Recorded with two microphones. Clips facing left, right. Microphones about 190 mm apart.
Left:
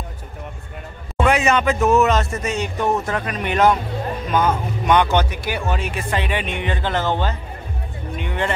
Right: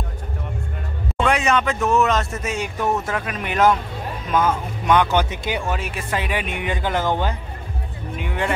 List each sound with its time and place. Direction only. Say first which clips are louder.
1.2 s speech: left 2 dB; 5° left (ahead or behind)
5.3 s speech: even; 20° right (ahead or behind)
5.7 s speech: left 2 dB; 5° right (ahead or behind)